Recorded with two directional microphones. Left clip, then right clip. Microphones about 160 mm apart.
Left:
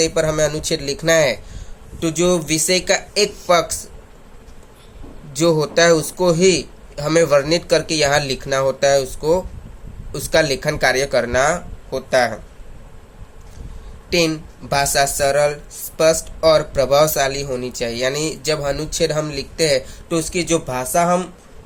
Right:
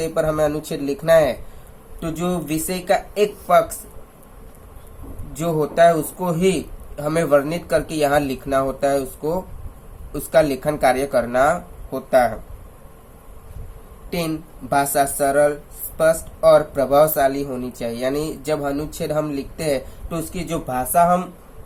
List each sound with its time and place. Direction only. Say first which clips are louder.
0.0 s speech: left 2 dB; 40° left (ahead or behind)
5.4 s speech: left 1 dB; 45° left (ahead or behind)
14.7 s speech: left 1 dB; 45° left (ahead or behind)